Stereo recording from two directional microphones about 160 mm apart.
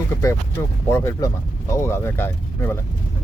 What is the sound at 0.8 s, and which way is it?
Speech, 15° left (ahead or behind).